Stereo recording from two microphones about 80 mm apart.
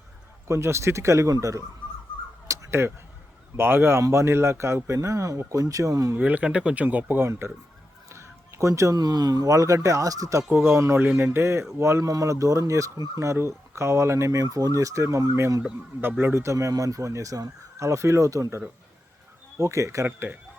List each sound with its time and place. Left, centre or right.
0.4 s speech: right
2.5 s a sound: right
3.6 s speech: right
6.1 s speech: centre
7.3 s speech: right
10.5 s speech: right
14.4 s speech: right
16.0 s speech: right
19.5 s speech: right
20.1 s speech: right